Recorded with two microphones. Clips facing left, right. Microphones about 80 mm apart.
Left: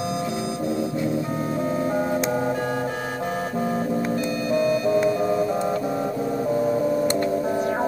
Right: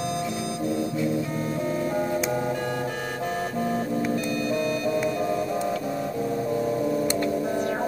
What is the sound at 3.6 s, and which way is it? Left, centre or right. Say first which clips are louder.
Music: left 2 dB; centre.